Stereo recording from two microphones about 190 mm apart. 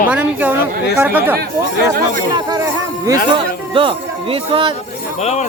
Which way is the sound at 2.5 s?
15° right (ahead or behind).